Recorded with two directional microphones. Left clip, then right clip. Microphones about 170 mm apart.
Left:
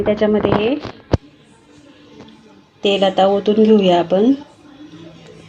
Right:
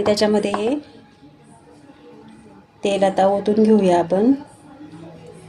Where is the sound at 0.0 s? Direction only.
5° left (ahead or behind).